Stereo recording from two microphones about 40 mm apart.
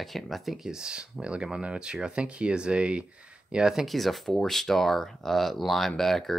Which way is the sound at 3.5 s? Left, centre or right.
Centre.